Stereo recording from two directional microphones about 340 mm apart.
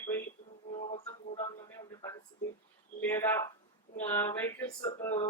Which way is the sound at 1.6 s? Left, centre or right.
Centre.